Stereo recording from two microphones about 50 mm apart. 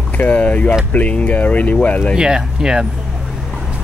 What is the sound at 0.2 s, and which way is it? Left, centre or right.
Speech, left.